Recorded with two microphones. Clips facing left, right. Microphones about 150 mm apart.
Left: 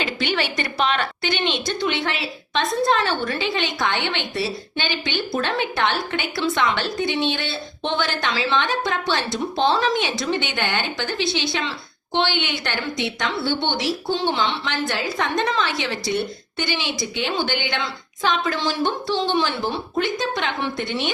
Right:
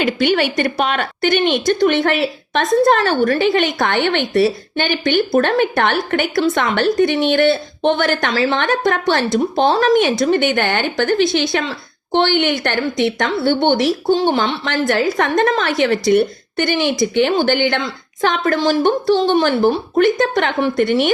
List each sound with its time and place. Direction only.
0.0 s a woman's voice: 50° right (ahead or behind)